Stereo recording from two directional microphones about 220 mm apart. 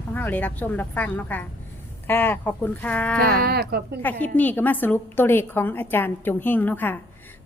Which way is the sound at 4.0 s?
10° left (ahead or behind).